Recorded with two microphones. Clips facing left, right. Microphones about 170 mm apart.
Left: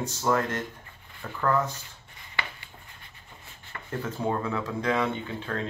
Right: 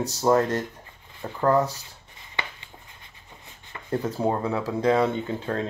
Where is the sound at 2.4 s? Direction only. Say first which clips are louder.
Right 1 dB; 20° right (ahead or behind).